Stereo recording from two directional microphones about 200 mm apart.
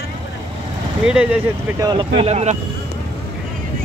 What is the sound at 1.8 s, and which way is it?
Speech, 25° right (ahead or behind).